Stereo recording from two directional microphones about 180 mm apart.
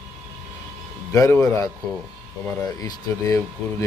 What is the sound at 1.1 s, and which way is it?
Speech, 15° left (ahead or behind).